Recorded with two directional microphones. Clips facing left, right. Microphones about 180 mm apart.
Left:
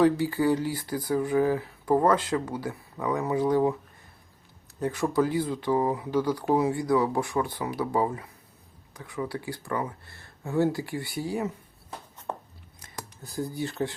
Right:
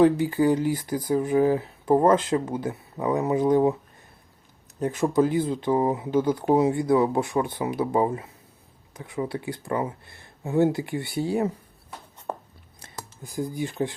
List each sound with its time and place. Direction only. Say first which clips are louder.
0.0 s speech: right 3 dB; 20° right (ahead or behind)
4.8 s speech: right 3 dB; 20° right (ahead or behind)
13.2 s speech: right 2 dB; 15° right (ahead or behind)